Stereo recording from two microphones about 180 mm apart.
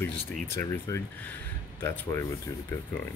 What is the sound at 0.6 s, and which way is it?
Speech, 15° left (ahead or behind).